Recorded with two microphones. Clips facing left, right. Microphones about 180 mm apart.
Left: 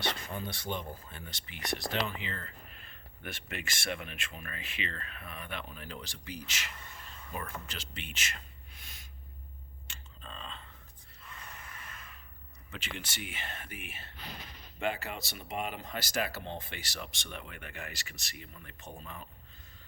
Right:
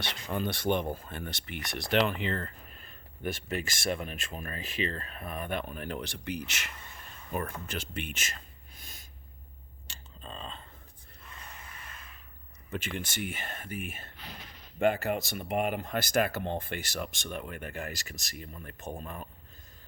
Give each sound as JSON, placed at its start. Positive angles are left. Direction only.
{"t": 0.3, "sound": "speech", "side_deg": -70}
{"t": 2.7, "sound": "speech", "side_deg": -40}
{"t": 9.9, "sound": "a sound", "side_deg": -35}
{"t": 12.7, "sound": "speech", "side_deg": -50}